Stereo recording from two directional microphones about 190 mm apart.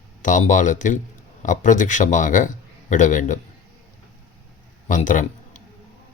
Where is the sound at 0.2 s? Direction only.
40° left (ahead or behind).